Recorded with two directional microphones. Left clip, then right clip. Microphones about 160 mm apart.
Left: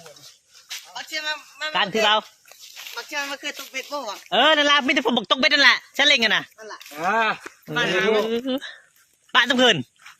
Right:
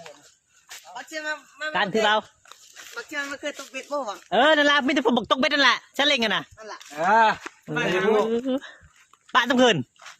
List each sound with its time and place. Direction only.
0.9 s a man's voice: 70° right (ahead or behind)
1.7 s a woman's voice: 20° right (ahead or behind)
2.5 s speech: 60° right (ahead or behind)
4.3 s a woman's voice: 25° right (ahead or behind)
6.7 s speech: 75° right (ahead or behind)
7.8 s speech: 60° right (ahead or behind)
8.4 s a woman's voice: 15° right (ahead or behind)